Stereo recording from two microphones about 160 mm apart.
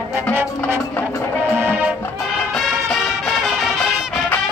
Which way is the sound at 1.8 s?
10° right (ahead or behind).